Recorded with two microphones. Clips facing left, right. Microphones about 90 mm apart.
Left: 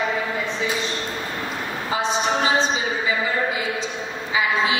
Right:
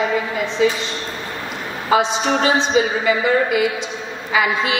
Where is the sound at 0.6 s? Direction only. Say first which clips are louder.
Right 11 dB; 75° right (ahead or behind).